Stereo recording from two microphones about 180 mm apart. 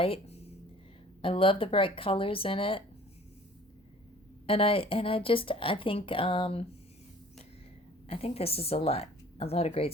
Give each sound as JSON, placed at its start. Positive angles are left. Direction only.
{"t": 0.0, "sound": "a woman's voice", "side_deg": 30}
{"t": 4.4, "sound": "a woman's voice", "side_deg": 30}
{"t": 8.0, "sound": "speech", "side_deg": 35}